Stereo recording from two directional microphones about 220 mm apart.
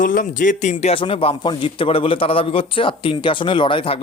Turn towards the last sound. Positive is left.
turn(degrees=25)  # may be behind; listen again after turning